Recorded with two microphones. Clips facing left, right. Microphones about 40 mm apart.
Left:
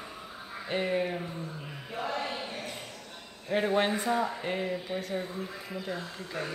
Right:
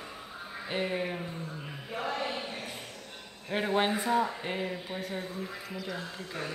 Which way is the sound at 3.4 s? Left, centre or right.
Centre.